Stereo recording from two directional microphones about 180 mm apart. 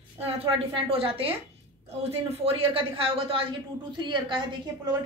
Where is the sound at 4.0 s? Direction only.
25° right (ahead or behind).